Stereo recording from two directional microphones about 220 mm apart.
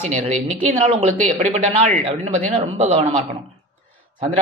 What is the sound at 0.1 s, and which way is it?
Speech, 30° right (ahead or behind).